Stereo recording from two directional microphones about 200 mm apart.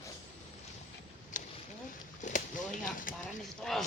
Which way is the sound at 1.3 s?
40° left (ahead or behind).